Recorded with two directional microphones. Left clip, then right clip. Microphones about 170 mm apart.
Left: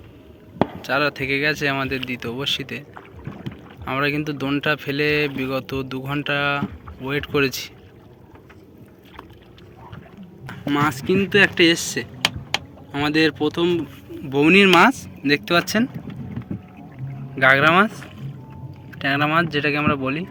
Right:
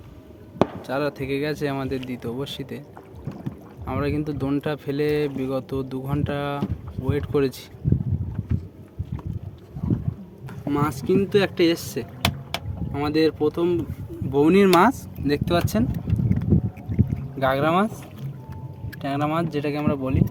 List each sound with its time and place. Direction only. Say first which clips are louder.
0.8 s speech: left 5 dB; 15° right (ahead or behind)
3.8 s speech: left 4 dB; 10° right (ahead or behind)
10.7 s speech: left 3 dB; 5° right (ahead or behind)
17.3 s speech: left 7 dB; 5° right (ahead or behind)
18.9 s speech: left 6 dB; 5° right (ahead or behind)